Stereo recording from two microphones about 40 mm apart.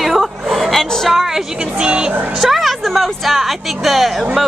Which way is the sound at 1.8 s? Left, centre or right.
Right.